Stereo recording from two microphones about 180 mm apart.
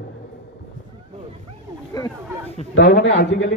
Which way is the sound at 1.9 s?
20° left (ahead or behind).